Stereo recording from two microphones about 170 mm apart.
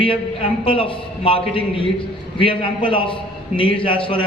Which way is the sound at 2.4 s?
30° left (ahead or behind).